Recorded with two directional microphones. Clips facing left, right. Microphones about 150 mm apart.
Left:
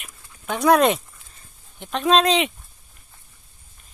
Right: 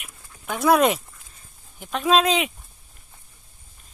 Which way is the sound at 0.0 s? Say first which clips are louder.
Left 2 dB; 5° right (ahead or behind).